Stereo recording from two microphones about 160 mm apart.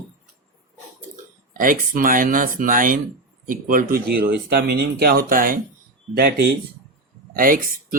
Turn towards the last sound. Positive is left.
turn(degrees=-60)  # may be behind; listen again after turning